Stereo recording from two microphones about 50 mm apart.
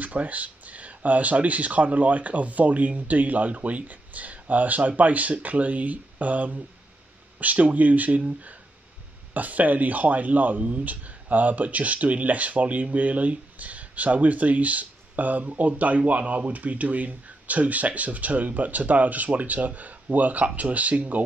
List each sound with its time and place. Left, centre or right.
0.0 s speech: right
9.3 s speech: right